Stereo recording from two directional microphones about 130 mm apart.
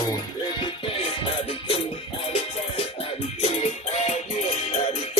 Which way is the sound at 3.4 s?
55° left (ahead or behind).